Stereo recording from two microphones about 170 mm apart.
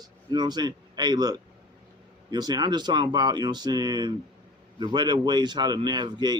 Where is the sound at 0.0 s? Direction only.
25° right (ahead or behind).